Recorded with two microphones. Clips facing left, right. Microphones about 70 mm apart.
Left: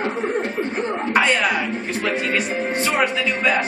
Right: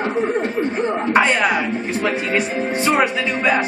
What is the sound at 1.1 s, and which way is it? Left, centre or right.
Speech, centre.